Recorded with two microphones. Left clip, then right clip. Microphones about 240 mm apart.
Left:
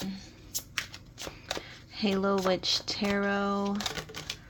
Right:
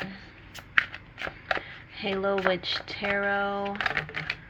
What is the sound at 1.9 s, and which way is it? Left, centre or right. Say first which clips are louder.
Speech: right 1 dB; left.